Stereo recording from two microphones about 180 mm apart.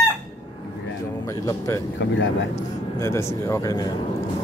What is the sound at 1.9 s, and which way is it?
Speech, 90° left.